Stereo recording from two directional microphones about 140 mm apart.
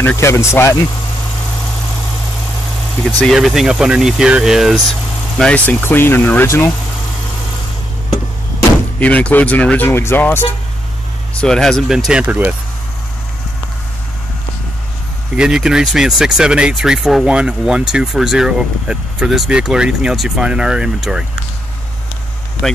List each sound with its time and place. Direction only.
0.0 s speech: 20° left (ahead or behind)
3.2 s speech: centre (ahead or behind)
5.4 s speech: 10° left (ahead or behind)
9.0 s speech: 10° left (ahead or behind); by 12.5 s 10° right (ahead or behind)
15.3 s speech: 5° right (ahead or behind)
22.6 s speech: 5° left (ahead or behind)